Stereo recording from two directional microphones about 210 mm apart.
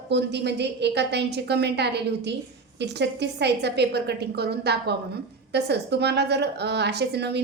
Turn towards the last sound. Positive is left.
turn(degrees=-50)  # may be behind; listen again after turning